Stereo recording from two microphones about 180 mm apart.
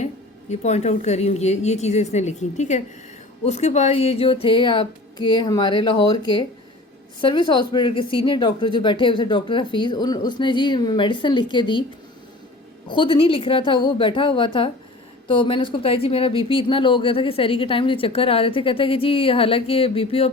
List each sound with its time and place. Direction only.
0.6 s speech: 40° left (ahead or behind)
12.9 s speech: 30° left (ahead or behind)